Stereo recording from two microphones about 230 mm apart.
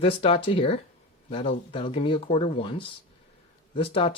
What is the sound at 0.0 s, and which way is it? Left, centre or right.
Speech, left.